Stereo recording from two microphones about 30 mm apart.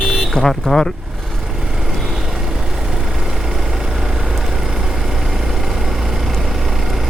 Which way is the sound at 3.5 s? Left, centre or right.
Centre.